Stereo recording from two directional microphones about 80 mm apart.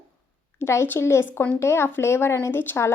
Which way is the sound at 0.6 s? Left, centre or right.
Left.